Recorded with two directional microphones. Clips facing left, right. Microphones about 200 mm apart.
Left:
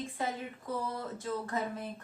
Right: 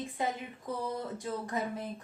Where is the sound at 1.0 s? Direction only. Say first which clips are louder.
Even; 15° right (ahead or behind).